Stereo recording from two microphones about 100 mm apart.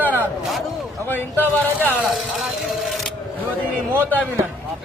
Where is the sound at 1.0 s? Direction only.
20° left (ahead or behind).